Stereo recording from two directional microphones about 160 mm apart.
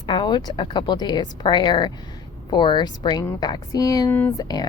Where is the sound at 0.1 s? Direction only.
30° left (ahead or behind).